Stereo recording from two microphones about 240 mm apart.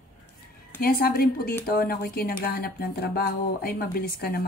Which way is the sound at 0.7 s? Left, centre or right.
Left.